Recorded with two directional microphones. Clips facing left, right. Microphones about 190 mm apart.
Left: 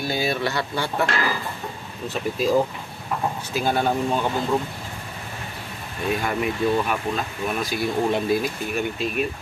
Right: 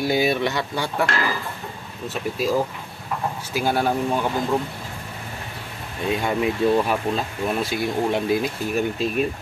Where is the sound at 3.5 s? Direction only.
10° right (ahead or behind).